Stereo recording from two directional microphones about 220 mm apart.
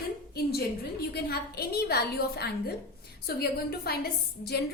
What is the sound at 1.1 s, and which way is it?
A woman's voice, 45° left (ahead or behind).